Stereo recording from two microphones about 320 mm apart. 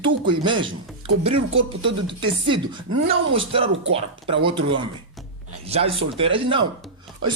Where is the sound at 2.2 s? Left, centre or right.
Centre.